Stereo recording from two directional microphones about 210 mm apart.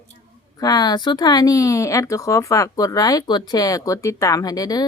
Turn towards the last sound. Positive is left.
turn(degrees=15)  # may be behind; listen again after turning